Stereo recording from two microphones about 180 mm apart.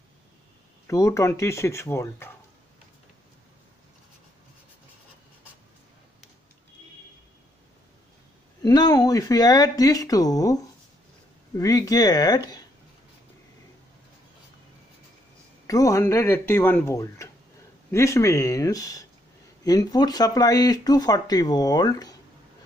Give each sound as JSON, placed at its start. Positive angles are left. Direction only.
{"t": 0.8, "sound": "speech", "side_deg": 15}
{"t": 8.6, "sound": "speech", "side_deg": 20}
{"t": 15.6, "sound": "speech", "side_deg": 20}